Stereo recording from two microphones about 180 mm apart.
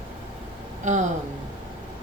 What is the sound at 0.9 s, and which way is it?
Speech, 40° right (ahead or behind).